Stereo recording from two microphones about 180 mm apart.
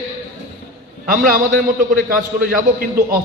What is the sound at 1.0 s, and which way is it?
A man's voice, 50° right (ahead or behind).